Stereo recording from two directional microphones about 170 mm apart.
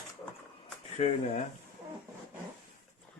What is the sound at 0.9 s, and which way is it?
Speech, 40° left (ahead or behind).